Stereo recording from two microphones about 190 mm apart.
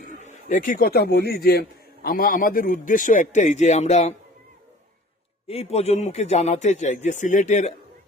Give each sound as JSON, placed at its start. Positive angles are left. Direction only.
{"t": 0.3, "sound": "a man's voice", "side_deg": 40}
{"t": 5.5, "sound": "speech", "side_deg": 30}